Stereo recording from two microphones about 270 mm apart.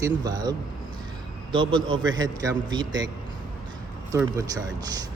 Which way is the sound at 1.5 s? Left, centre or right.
Centre.